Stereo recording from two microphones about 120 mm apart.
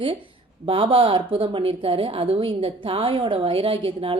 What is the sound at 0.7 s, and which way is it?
A woman's voice, 45° right (ahead or behind).